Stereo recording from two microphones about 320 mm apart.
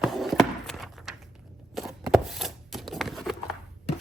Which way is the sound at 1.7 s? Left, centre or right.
Centre.